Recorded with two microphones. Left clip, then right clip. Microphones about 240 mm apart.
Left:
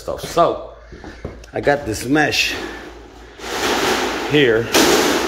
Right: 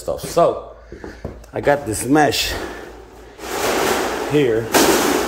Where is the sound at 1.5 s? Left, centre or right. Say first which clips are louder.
Even; centre.